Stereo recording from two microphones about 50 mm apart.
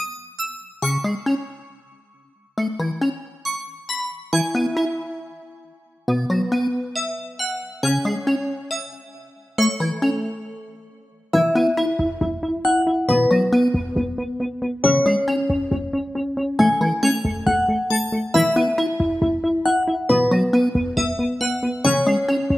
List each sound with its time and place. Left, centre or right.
0.0 s music: centre
2.5 s music: centre
6.0 s music: centre
8.4 s music: centre
9.6 s music: centre
11.3 s music: centre